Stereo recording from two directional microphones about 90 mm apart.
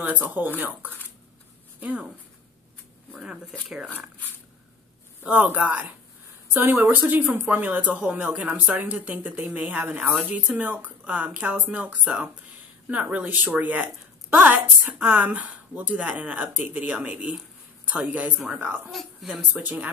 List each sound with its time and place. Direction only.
0.0 s speech: 20° right (ahead or behind)
3.1 s speech: 5° right (ahead or behind)
5.2 s a woman's voice: 20° right (ahead or behind)
8.0 s a woman's voice: 10° right (ahead or behind)
18.9 s speech: centre (ahead or behind)
19.5 s a woman's voice: 15° right (ahead or behind)